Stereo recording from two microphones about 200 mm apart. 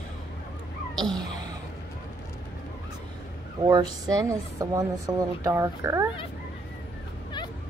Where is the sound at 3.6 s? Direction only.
20° right (ahead or behind).